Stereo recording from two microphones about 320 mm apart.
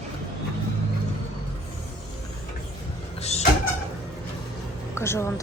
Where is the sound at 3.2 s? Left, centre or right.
Centre.